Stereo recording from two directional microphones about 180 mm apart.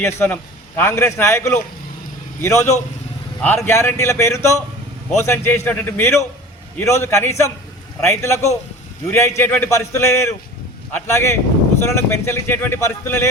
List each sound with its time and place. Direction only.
0.8 s speech: 15° left (ahead or behind)